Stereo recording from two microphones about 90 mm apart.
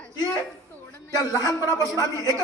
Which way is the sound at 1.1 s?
40° left (ahead or behind).